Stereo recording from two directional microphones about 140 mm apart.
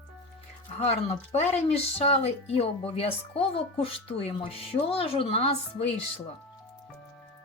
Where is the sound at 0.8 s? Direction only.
50° left (ahead or behind).